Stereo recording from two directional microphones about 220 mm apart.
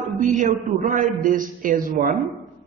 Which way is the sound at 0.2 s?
35° right (ahead or behind).